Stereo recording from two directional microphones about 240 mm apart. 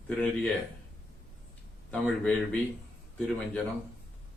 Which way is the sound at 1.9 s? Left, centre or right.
Centre.